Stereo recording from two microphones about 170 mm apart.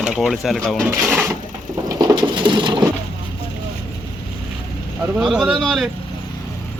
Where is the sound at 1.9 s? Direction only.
20° right (ahead or behind).